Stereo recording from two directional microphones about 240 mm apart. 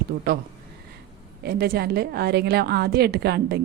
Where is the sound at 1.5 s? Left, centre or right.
Right.